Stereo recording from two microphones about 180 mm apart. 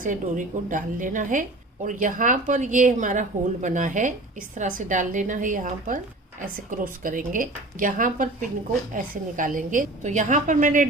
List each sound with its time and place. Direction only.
0.0 s a woman's voice: 45° right (ahead or behind)